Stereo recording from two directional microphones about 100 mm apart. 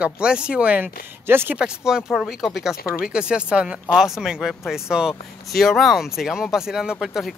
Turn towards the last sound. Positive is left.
turn(degrees=0)  # may be behind; listen again after turning